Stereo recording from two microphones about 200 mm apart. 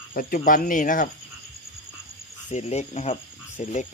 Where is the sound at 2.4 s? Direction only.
35° left (ahead or behind).